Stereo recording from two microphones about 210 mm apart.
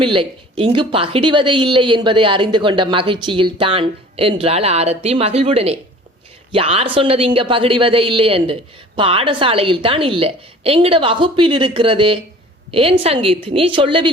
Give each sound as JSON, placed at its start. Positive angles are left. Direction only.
{"t": 0.0, "sound": "speech", "side_deg": -25}